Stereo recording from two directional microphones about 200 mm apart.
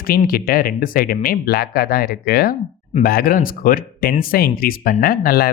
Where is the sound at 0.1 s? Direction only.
45° left (ahead or behind).